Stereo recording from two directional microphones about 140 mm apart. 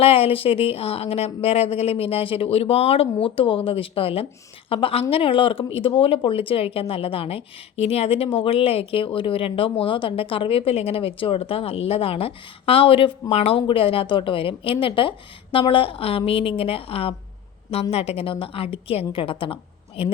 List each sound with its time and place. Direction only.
0.0 s a woman's voice: 45° left (ahead or behind)